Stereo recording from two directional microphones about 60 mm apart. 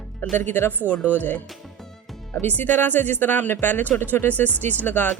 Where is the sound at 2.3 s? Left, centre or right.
Left.